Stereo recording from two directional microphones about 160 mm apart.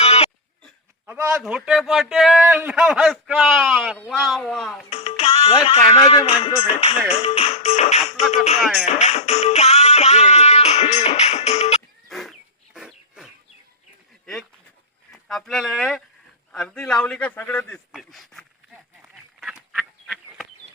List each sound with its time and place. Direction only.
0.0 s throat clearing: 40° left (ahead or behind)
1.0 s a sound: 15° right (ahead or behind)
1.4 s a man's voice: 5° right (ahead or behind)
3.9 s a man's voice: 10° left (ahead or behind)
4.9 s music: 40° left (ahead or behind)
6.1 s speech: 40° left (ahead or behind)
8.6 s a man's voice: centre (ahead or behind)
9.0 s music: 45° left (ahead or behind)
12.0 s a sound: centre (ahead or behind)
15.1 s a man's voice: centre (ahead or behind)
19.4 s duck: 5° right (ahead or behind)